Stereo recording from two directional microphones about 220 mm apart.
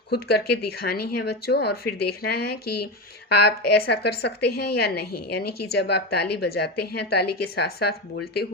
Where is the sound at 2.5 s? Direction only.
90° left.